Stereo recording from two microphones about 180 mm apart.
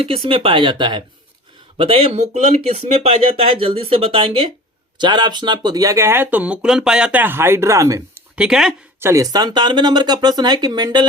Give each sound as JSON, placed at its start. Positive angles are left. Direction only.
{"t": 0.0, "sound": "speech", "side_deg": -30}
{"t": 8.4, "sound": "speech", "side_deg": -5}
{"t": 9.0, "sound": "speech", "side_deg": -15}